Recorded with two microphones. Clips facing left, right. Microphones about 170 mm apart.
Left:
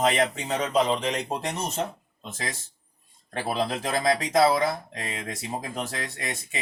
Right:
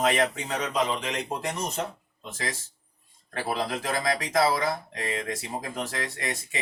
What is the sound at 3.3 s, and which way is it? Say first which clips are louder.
Speech: left 2 dB; 25° left (ahead or behind).